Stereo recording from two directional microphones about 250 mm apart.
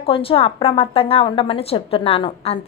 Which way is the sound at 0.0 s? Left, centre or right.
Left.